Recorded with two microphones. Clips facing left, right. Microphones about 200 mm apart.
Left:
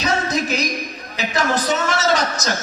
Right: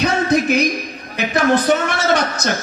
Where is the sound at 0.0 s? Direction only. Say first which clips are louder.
Right 5 dB; 60° right (ahead or behind).